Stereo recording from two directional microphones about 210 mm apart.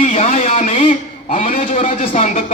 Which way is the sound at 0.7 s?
25° left (ahead or behind).